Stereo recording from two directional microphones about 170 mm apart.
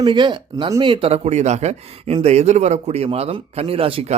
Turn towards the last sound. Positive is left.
turn(degrees=-35)  # may be behind; listen again after turning